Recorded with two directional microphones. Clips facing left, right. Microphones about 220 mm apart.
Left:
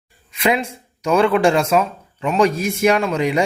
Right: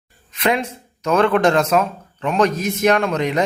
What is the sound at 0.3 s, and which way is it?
Speech, 10° left (ahead or behind).